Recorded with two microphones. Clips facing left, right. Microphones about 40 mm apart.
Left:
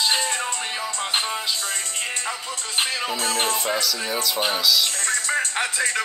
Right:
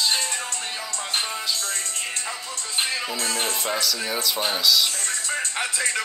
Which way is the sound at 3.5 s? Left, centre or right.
Centre.